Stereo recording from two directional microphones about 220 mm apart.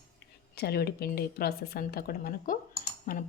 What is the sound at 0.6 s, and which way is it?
A woman's voice, 45° left (ahead or behind).